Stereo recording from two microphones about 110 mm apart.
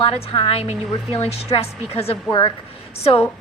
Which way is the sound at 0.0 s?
55° left (ahead or behind).